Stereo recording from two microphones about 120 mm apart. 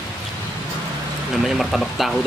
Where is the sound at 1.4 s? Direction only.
Centre (ahead or behind).